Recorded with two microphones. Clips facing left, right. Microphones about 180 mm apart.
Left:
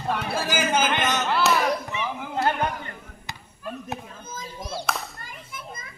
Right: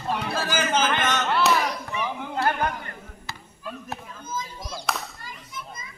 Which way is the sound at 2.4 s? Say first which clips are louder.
Left 1 dB; 20° left (ahead or behind).